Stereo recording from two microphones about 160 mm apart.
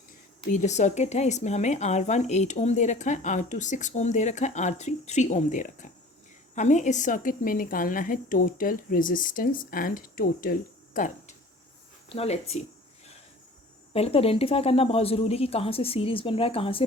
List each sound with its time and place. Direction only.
0.5 s a woman's voice: 45° left (ahead or behind)
12.0 s speech: 40° left (ahead or behind)
13.9 s speech: 40° left (ahead or behind)